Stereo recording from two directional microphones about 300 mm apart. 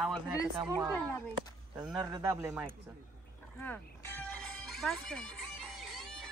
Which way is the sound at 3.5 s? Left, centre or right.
Centre.